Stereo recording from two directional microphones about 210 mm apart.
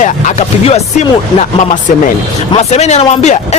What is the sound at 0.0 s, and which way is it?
Speech, 35° left (ahead or behind).